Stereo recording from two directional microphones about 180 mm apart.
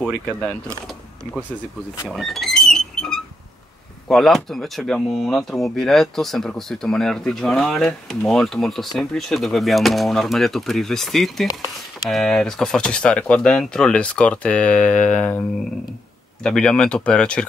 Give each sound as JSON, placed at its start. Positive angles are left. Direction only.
{"t": 0.0, "sound": "speech", "side_deg": 0}
{"t": 2.0, "sound": "a sound", "side_deg": 0}
{"t": 4.1, "sound": "speech", "side_deg": 0}
{"t": 16.4, "sound": "speech", "side_deg": 5}